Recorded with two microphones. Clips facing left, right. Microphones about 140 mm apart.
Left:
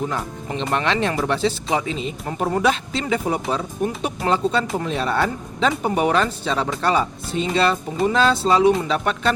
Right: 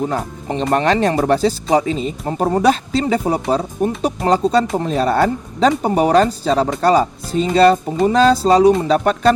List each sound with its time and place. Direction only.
0.4 s speech: 40° right (ahead or behind)